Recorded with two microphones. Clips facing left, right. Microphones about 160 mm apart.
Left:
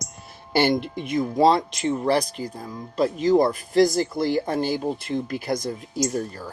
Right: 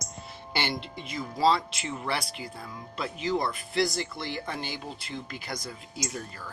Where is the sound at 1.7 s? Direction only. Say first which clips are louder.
Left 11 dB; 35° left (ahead or behind).